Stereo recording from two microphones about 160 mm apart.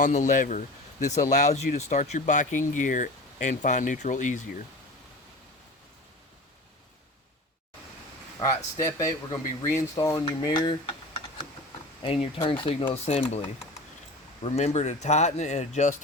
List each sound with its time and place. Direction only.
0.0 s speech: 50° left (ahead or behind)
8.4 s speech: 20° left (ahead or behind)
12.0 s speech: 35° left (ahead or behind)
14.4 s speech: 40° left (ahead or behind)